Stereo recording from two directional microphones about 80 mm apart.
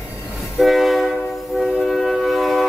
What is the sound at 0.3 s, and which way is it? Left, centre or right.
Train, centre.